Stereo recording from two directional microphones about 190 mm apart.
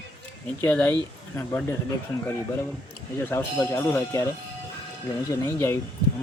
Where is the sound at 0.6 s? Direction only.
10° left (ahead or behind).